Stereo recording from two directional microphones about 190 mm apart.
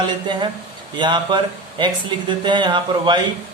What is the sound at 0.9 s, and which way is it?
A man's voice, 25° right (ahead or behind).